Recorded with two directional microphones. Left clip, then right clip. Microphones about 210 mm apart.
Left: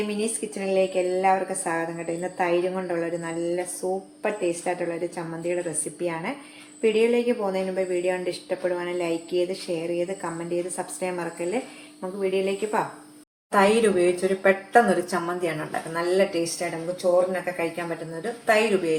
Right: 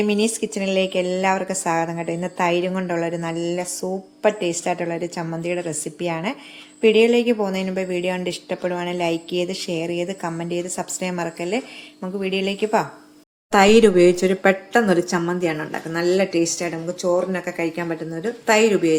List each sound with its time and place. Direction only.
0.1 s a woman's voice: 45° right (ahead or behind)